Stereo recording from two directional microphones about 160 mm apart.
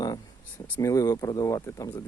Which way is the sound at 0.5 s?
20° left (ahead or behind).